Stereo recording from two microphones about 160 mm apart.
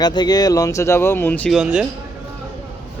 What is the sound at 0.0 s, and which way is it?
Speech, 25° left (ahead or behind).